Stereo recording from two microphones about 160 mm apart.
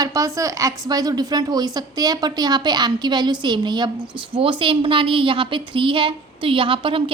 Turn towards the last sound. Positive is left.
turn(degrees=-35)  # may be behind; listen again after turning